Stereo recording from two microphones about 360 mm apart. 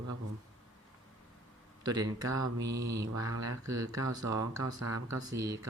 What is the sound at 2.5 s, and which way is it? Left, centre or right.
Mantra, right.